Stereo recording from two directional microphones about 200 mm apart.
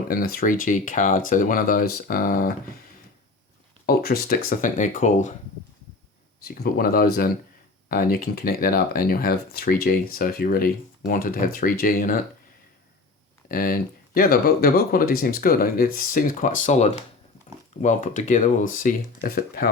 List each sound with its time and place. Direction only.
0.1 s speech: 45° left (ahead or behind)
3.8 s speech: 50° left (ahead or behind)
6.5 s speech: 45° left (ahead or behind)
13.5 s speech: 45° left (ahead or behind)